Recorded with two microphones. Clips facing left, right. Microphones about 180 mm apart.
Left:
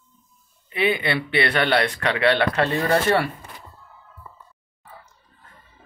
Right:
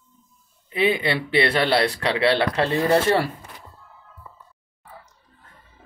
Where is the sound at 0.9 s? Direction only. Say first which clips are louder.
Right 1 dB; 30° right (ahead or behind).